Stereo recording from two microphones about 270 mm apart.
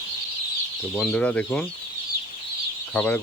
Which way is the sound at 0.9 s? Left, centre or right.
Centre.